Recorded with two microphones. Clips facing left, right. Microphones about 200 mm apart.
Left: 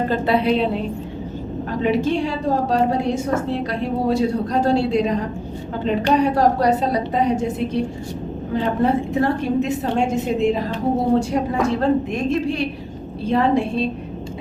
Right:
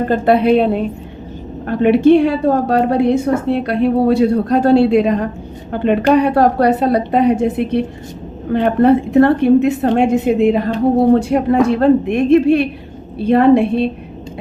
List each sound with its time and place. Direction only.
0.1 s a woman's voice: 55° right (ahead or behind)